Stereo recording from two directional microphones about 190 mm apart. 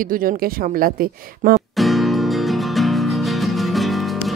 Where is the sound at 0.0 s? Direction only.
45° right (ahead or behind).